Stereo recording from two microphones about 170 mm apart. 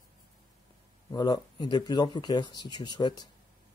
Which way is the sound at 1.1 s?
25° left (ahead or behind).